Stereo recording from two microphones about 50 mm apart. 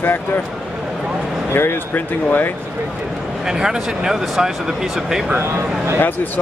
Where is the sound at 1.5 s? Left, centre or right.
Left.